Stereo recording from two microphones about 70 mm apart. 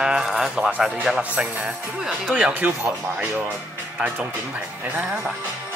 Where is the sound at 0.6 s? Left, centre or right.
Centre.